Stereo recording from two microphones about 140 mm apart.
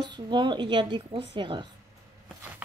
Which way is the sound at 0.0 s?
35° right (ahead or behind).